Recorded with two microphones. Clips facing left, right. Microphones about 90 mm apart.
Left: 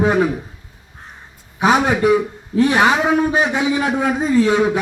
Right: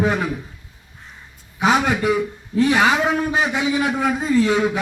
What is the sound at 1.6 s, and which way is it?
A man's voice, 20° left (ahead or behind).